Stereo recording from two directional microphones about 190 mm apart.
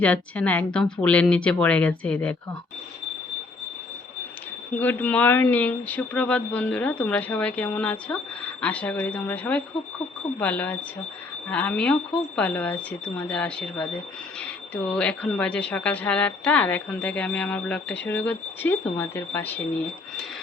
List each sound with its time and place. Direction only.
0.0 s speech: 5° left (ahead or behind)
4.8 s speech: 10° left (ahead or behind)